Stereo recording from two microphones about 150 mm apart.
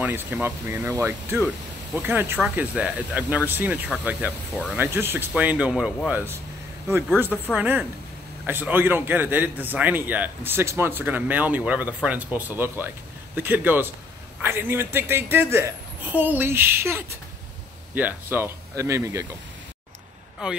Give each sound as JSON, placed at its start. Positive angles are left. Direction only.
{"t": 0.0, "sound": "a man's voice", "side_deg": -15}
{"t": 7.5, "sound": "a man's voice", "side_deg": -10}